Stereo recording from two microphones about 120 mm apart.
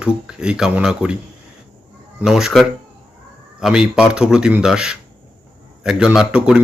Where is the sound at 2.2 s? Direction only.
5° right (ahead or behind).